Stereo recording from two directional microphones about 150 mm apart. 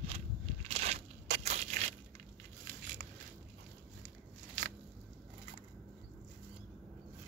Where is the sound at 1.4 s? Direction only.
50° right (ahead or behind).